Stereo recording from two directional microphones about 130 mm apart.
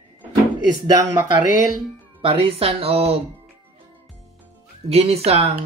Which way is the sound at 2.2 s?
45° right (ahead or behind).